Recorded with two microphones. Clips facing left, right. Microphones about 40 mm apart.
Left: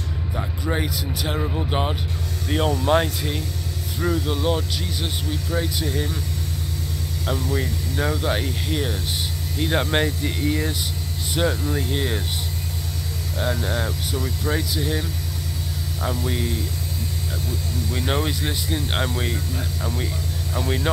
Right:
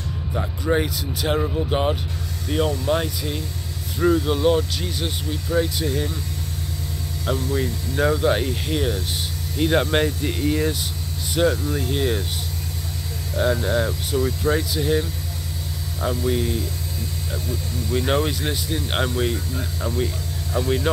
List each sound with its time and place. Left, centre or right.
0.4 s speech: centre
1.4 s speech: centre
4.0 s speech: centre
7.2 s speech: centre
13.4 s speech: centre
16.2 s speech: centre
17.9 s speech: centre